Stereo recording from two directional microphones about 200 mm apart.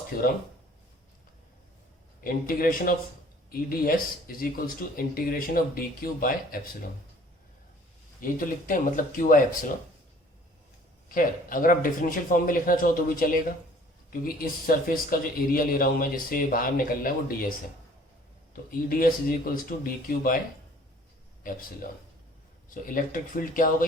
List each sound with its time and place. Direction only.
2.2 s speech: 45° left (ahead or behind)
8.2 s speech: 45° left (ahead or behind)
11.1 s speech: 45° left (ahead or behind)
18.5 s speech: 45° left (ahead or behind)
21.4 s speech: 45° left (ahead or behind)